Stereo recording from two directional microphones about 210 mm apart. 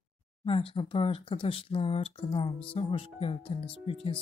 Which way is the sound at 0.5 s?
25° left (ahead or behind).